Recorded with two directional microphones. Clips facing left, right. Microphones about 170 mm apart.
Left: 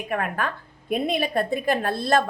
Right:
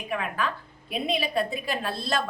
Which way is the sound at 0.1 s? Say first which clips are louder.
Left 2 dB; 50° left (ahead or behind).